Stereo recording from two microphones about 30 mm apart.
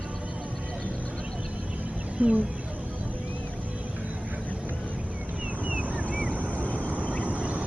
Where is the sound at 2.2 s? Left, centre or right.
Right.